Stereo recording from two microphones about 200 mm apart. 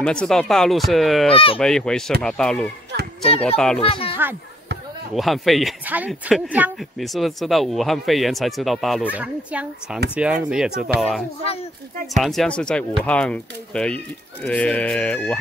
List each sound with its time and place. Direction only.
0.0 s speech: 5° left (ahead or behind)
1.3 s speech: 25° left (ahead or behind)
1.6 s speech: 5° left (ahead or behind)
3.8 s speech: 25° left (ahead or behind)
5.1 s speech: centre (ahead or behind)